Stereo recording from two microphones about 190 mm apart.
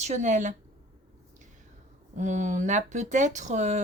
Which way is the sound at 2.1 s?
40° right (ahead or behind).